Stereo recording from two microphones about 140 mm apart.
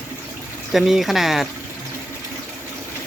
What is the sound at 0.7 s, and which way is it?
Speech, centre (ahead or behind).